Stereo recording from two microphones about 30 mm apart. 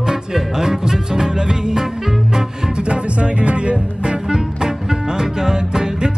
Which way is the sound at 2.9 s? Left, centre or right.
Right.